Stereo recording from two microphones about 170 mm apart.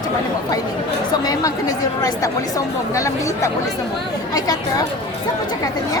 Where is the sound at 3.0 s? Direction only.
20° left (ahead or behind).